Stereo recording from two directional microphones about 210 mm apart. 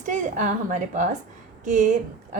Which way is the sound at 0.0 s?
35° right (ahead or behind).